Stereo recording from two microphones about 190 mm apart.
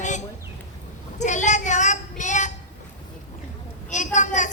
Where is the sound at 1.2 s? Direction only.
40° left (ahead or behind).